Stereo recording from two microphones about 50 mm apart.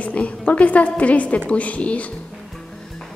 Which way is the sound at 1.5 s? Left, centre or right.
Left.